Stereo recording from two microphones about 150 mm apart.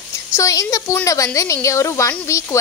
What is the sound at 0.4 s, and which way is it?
Speech, 20° left (ahead or behind).